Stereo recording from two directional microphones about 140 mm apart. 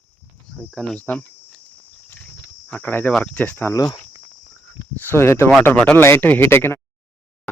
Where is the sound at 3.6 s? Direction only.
20° left (ahead or behind).